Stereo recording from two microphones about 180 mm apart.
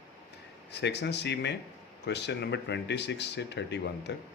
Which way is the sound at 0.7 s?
70° left (ahead or behind).